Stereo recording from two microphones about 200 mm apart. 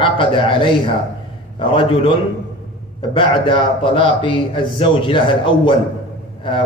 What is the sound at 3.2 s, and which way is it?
A man's voice, 25° left (ahead or behind).